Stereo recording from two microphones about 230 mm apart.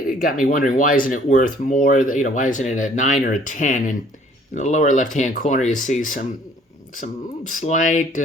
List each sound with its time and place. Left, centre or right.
0.1 s speech: left